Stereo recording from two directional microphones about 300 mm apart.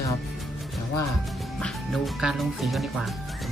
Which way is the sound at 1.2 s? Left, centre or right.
Centre.